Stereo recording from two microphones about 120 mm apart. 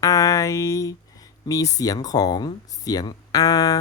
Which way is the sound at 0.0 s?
25° left (ahead or behind).